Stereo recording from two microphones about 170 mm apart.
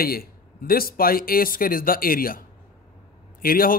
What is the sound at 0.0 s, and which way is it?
Speech, 60° left (ahead or behind).